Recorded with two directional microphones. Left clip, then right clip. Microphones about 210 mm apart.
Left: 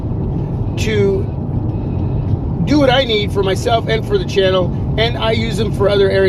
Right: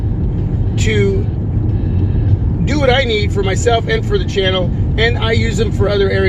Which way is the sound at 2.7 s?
30° left (ahead or behind).